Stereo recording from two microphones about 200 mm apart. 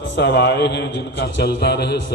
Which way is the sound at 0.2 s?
55° left (ahead or behind).